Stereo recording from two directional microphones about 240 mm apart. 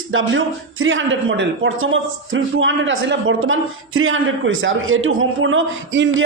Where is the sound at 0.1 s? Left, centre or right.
Right.